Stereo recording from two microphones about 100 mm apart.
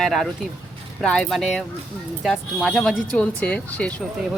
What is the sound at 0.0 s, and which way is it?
Speech, centre (ahead or behind).